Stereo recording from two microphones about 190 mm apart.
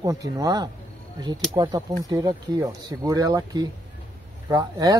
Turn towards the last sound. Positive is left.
turn(degrees=-20)  # may be behind; listen again after turning